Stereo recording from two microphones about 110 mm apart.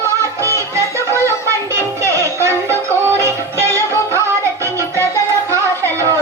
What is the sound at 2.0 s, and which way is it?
Music, 25° right (ahead or behind).